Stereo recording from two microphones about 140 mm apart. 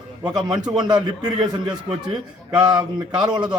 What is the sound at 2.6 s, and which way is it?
A man's voice, 30° right (ahead or behind).